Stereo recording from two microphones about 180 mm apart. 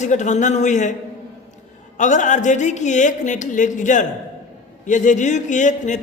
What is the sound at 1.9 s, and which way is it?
A man's voice, 45° left (ahead or behind).